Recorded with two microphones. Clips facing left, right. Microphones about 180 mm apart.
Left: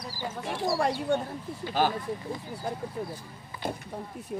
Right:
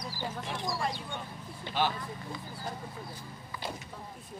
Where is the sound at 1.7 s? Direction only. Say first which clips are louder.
Left 4 dB; 45° left (ahead or behind).